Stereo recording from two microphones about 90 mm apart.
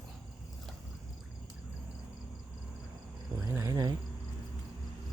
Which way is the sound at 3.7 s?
55° right (ahead or behind).